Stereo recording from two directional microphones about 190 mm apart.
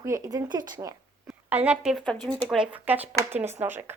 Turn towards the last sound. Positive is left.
turn(degrees=-10)  # may be behind; listen again after turning